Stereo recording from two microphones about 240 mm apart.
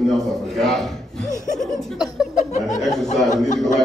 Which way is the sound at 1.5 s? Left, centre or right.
Centre.